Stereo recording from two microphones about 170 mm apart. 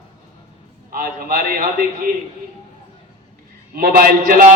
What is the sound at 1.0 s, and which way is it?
Speech, 55° right (ahead or behind).